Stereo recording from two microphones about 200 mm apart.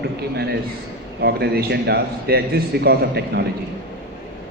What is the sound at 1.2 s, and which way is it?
A man's voice, 50° right (ahead or behind).